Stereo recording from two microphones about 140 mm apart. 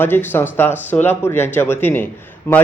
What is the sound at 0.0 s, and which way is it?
Speech, 15° left (ahead or behind).